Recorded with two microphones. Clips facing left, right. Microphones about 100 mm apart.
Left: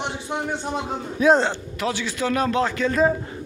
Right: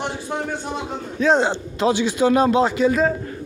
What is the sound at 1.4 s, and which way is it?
A man's voice, 20° right (ahead or behind).